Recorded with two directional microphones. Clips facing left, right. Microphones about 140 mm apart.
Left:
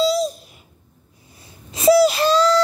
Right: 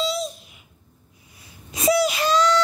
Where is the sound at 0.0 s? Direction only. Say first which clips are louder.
Left 7 dB; 35° left (ahead or behind).